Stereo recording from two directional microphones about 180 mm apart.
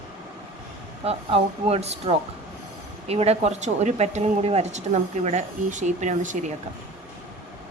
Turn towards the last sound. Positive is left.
turn(degrees=-45)  # may be behind; listen again after turning